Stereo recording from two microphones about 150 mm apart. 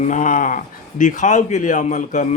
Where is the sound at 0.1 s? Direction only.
60° left (ahead or behind).